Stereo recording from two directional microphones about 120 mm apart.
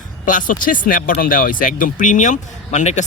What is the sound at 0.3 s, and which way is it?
Speech, 90° left.